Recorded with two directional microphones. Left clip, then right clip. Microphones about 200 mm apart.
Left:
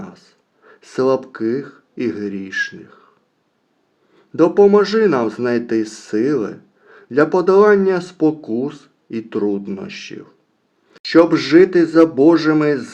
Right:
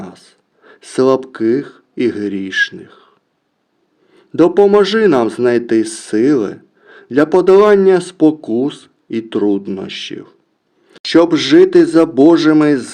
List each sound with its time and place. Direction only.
0.0 s speech: 35° right (ahead or behind)
4.1 s a man's voice: 35° right (ahead or behind)